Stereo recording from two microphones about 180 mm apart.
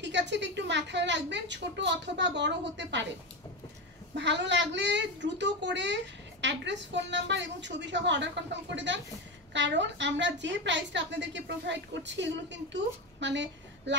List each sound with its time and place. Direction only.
0.0 s a woman's voice: 75° right (ahead or behind)
4.1 s a woman's voice: 75° right (ahead or behind)